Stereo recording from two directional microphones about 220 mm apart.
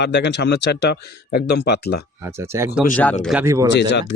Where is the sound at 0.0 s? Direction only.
50° left (ahead or behind).